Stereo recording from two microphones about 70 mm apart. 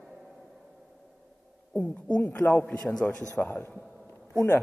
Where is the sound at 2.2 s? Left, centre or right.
Left.